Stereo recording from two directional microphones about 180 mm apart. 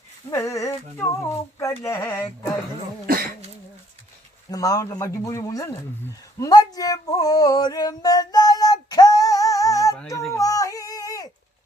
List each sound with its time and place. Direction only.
0.3 s speech: 15° left (ahead or behind)
4.5 s speech: 20° left (ahead or behind)
6.4 s male singing: 20° left (ahead or behind)
10.1 s a sound: 15° left (ahead or behind)